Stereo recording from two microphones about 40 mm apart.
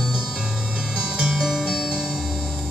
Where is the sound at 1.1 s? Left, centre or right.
Centre.